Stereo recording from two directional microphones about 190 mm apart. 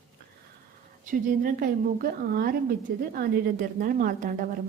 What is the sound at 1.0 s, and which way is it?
Speech, 45° right (ahead or behind).